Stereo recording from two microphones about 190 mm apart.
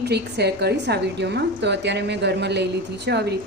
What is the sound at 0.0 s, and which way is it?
A woman's voice, 60° right (ahead or behind).